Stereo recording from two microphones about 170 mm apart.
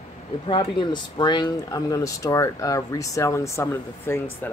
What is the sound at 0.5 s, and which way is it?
Speech, 30° left (ahead or behind).